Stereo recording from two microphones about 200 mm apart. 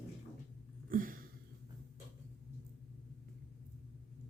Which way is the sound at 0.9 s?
45° right (ahead or behind).